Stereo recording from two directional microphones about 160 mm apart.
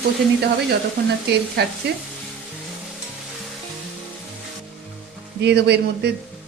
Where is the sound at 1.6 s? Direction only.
90° right.